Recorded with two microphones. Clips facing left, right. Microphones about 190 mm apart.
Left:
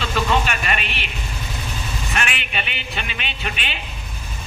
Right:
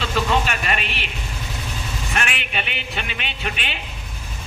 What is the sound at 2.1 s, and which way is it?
A man's voice, 50° right (ahead or behind).